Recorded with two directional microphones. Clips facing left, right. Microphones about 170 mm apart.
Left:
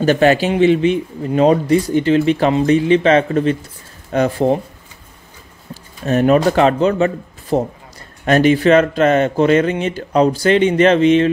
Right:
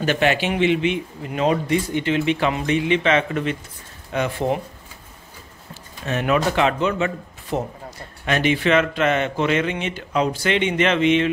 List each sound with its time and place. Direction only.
0.0 s speech: 40° left (ahead or behind)
6.0 s speech: 40° left (ahead or behind)